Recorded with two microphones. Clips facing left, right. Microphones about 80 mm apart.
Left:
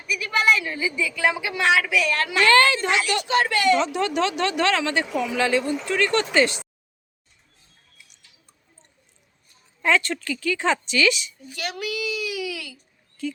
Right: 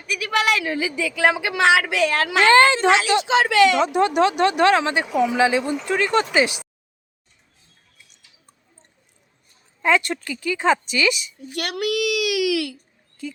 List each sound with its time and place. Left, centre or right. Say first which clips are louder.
0.1 s a woman's voice: even; right
2.5 s speech: right 3 dB; right
2.8 s speech: right 6 dB; right
3.8 s speech: right 5 dB; centre
9.8 s speech: right 2 dB; centre
11.5 s a child's voice: right 6 dB; right